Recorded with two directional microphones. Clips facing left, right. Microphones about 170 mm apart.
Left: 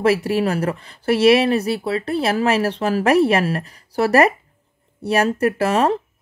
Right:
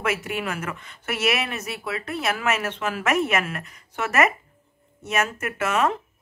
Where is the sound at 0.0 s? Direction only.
35° left (ahead or behind).